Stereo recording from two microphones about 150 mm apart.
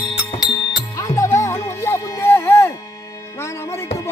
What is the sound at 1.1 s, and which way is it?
Music, 20° left (ahead or behind).